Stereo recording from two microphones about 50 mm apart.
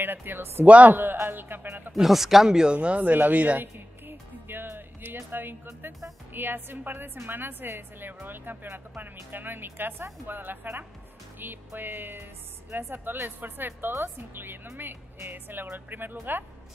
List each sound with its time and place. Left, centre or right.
0.0 s speech: right
0.7 s a man's voice: right
1.1 s speech: right
1.9 s speech: centre; by 3.1 s right
3.1 s speech: right
4.1 s music: right
5.1 s speech: right